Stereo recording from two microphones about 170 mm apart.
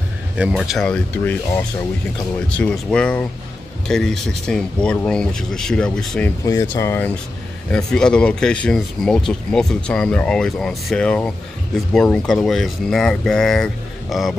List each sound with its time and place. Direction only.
0.4 s speech: 5° right (ahead or behind)
6.4 s speech: 20° left (ahead or behind)
7.7 s speech: 5° left (ahead or behind)